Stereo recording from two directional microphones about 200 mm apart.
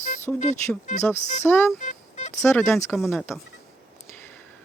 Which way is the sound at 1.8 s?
35° left (ahead or behind).